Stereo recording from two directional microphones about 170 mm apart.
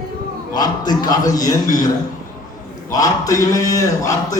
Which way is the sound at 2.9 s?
20° left (ahead or behind).